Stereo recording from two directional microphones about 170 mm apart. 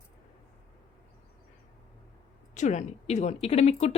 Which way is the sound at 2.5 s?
45° left (ahead or behind).